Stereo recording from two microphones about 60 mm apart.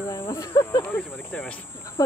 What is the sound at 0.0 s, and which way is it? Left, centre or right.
Speech, left.